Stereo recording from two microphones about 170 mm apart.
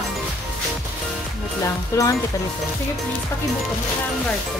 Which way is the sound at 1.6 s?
20° left (ahead or behind).